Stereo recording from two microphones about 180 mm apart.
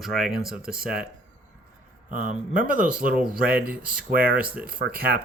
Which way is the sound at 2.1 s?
50° right (ahead or behind).